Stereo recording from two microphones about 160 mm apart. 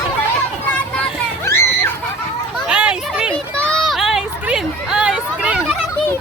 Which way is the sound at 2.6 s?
5° right (ahead or behind).